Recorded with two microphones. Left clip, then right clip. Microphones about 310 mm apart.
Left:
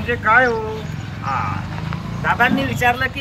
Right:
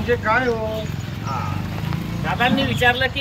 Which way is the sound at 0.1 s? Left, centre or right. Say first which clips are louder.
Left 5 dB; centre.